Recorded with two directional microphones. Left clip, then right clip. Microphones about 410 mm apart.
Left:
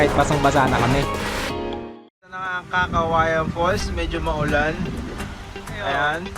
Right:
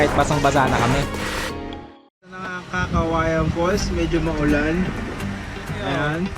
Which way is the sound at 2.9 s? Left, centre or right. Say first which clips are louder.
Left 2 dB; right.